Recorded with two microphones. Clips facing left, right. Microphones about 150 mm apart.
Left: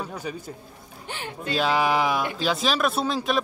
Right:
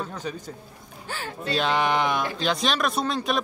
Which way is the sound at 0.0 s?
10° left (ahead or behind).